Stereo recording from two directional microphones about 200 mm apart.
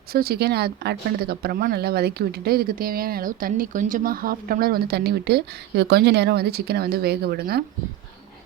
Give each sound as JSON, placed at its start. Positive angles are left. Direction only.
{"t": 0.1, "sound": "speech", "side_deg": -50}